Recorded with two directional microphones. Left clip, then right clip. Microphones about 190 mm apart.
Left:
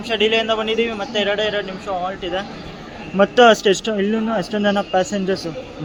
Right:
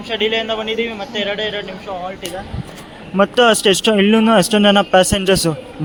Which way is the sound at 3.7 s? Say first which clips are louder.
Right 6 dB; 25° right (ahead or behind).